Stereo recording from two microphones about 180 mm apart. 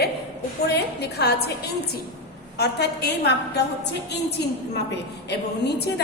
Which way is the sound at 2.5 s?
65° left (ahead or behind).